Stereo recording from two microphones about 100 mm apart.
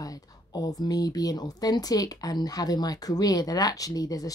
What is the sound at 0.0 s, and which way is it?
Speech, 35° left (ahead or behind).